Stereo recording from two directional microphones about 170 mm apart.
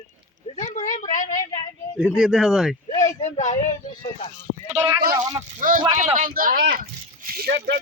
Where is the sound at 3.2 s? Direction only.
45° left (ahead or behind).